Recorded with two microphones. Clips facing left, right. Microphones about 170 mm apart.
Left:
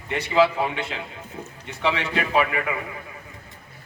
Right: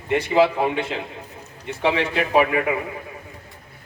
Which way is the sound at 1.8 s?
45° right (ahead or behind).